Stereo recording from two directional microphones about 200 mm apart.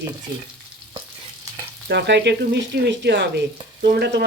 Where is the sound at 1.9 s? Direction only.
60° right (ahead or behind).